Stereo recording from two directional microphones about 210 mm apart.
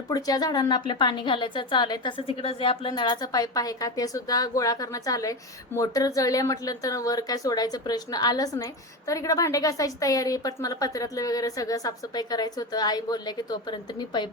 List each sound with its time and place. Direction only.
0.1 s a woman's voice: 20° left (ahead or behind)